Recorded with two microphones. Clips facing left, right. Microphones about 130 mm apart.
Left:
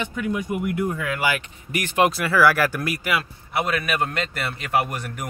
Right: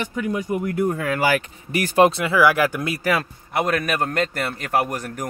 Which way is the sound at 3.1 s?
40° right (ahead or behind).